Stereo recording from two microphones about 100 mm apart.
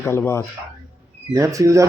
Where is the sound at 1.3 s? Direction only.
35° right (ahead or behind).